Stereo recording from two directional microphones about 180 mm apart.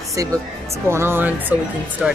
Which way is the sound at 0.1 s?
20° right (ahead or behind).